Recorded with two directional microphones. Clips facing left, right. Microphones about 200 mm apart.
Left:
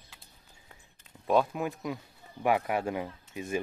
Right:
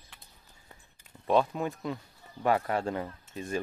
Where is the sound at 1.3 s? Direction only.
5° left (ahead or behind).